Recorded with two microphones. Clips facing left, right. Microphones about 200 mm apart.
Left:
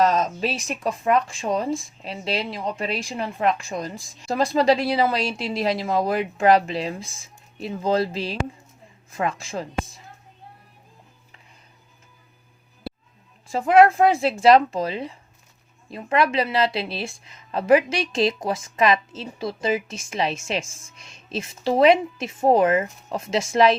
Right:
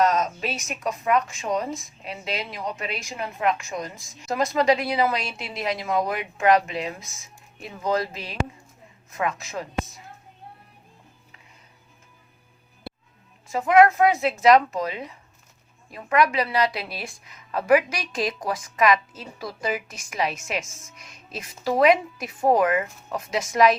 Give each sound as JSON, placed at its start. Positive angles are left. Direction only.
{"t": 0.0, "sound": "a woman's voice", "side_deg": 30}
{"t": 13.5, "sound": "a woman's voice", "side_deg": 30}